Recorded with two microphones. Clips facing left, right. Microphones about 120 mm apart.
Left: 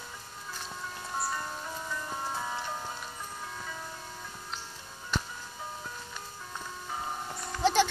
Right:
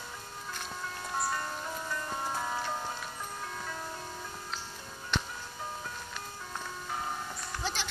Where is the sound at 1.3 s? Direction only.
5° left (ahead or behind).